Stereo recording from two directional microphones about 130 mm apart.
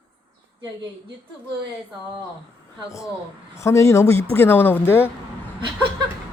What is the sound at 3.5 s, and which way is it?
A woman's voice, 20° left (ahead or behind).